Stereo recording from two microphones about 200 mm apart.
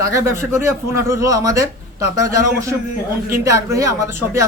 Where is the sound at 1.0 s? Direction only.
15° right (ahead or behind).